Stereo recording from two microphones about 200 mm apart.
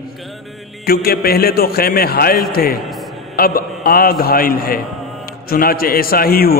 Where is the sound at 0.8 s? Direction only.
50° left (ahead or behind).